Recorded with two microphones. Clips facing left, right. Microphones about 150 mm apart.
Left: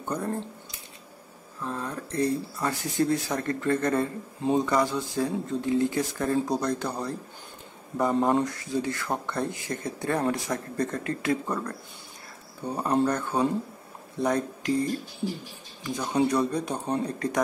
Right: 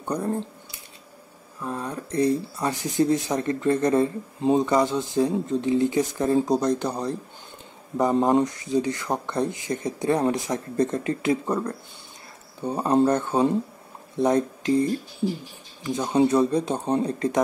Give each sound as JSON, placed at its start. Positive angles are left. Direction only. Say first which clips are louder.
{"t": 0.0, "sound": "speech", "louder": "right 4 dB", "side_deg": -15}
{"t": 1.6, "sound": "speech", "louder": "right 2 dB", "side_deg": -15}
{"t": 16.0, "sound": "speech", "louder": "right 5 dB", "side_deg": -25}